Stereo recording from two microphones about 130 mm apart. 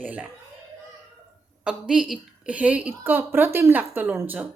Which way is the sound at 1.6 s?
5° right (ahead or behind).